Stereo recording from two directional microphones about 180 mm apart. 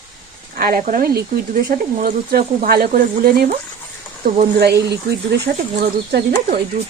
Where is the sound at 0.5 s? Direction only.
50° right (ahead or behind).